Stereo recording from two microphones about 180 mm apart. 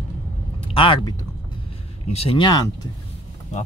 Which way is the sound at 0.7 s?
25° left (ahead or behind).